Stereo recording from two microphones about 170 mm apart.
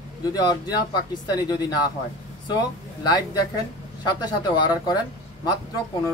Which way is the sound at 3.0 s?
20° left (ahead or behind).